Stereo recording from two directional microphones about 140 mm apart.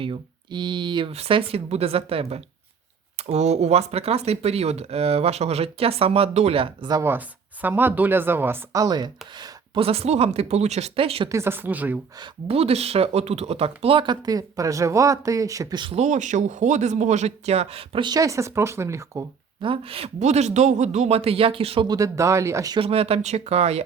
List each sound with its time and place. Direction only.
0.0 s speech: 35° right (ahead or behind)
1.1 s speech: 45° right (ahead or behind)
6.9 s speech: 15° right (ahead or behind); by 11.3 s 40° right (ahead or behind)
11.3 s speech: 20° right (ahead or behind)
12.2 s speech: 45° right (ahead or behind); by 15.9 s 30° right (ahead or behind)
15.9 s speech: 55° right (ahead or behind); by 19.2 s 20° right (ahead or behind)
19.6 s speech: 40° right (ahead or behind)
21.8 s speech: 25° right (ahead or behind)
22.8 s speech: 45° right (ahead or behind)